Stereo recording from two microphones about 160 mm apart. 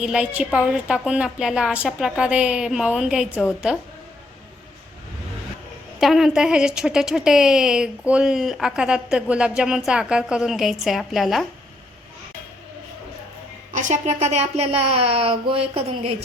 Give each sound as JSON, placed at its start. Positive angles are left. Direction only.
{"t": 0.0, "sound": "a woman's voice", "side_deg": -5}
{"t": 6.0, "sound": "a woman's voice", "side_deg": 0}
{"t": 13.7, "sound": "speech", "side_deg": -50}